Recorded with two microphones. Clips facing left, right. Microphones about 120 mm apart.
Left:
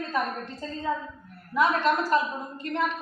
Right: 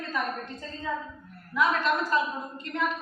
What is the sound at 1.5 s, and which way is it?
Speech, 35° left (ahead or behind).